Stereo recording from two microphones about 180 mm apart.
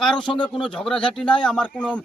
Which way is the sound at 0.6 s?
5° left (ahead or behind).